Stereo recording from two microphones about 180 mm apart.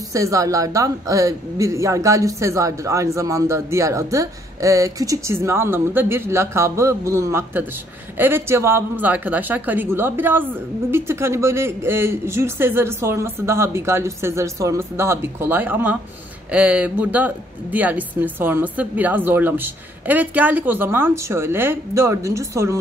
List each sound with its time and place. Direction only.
0.1 s speech: 15° right (ahead or behind)